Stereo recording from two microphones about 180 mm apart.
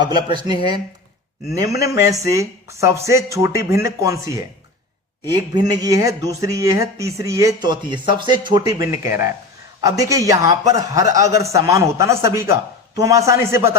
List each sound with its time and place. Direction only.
0.0 s speech: 25° right (ahead or behind)
1.5 s speech: 20° right (ahead or behind)
5.3 s speech: 20° right (ahead or behind)